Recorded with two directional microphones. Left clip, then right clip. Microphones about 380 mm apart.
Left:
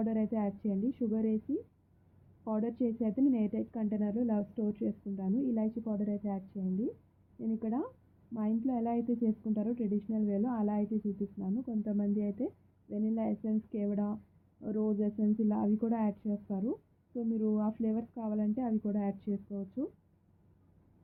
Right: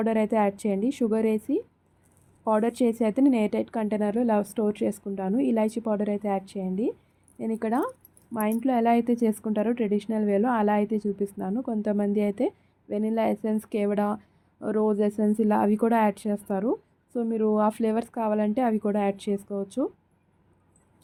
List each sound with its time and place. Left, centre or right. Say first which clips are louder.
0.0 s a woman's voice: right 12 dB; right
2.4 s a woman's voice: right 11 dB; right